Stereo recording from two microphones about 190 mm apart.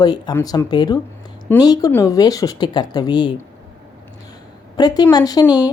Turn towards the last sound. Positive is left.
turn(degrees=20)  # may be behind; listen again after turning